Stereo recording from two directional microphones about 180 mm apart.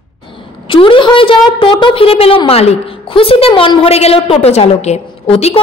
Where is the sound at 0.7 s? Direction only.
30° left (ahead or behind).